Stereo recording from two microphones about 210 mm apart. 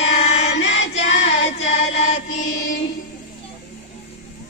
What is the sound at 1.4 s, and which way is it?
Music, 30° left (ahead or behind).